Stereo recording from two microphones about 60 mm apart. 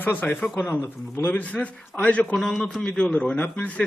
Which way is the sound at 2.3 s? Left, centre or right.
Centre.